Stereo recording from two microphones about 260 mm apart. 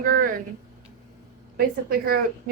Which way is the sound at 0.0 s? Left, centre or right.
Right.